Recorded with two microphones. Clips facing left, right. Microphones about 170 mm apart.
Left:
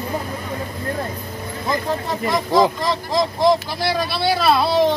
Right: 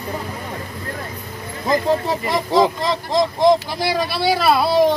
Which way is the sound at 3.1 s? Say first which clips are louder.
Right 2 dB; 15° right (ahead or behind).